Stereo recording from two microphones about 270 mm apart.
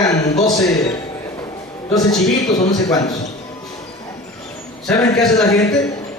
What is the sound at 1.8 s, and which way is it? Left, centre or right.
Speech, centre.